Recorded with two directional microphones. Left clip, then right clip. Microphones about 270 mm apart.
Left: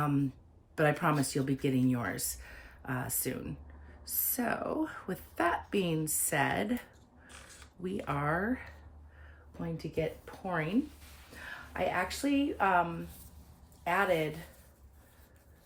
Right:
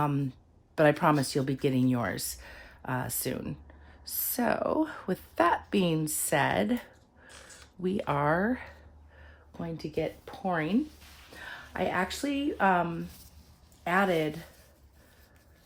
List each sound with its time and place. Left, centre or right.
0.0 s a woman's voice: right
7.3 s crow: centre
7.8 s a woman's voice: right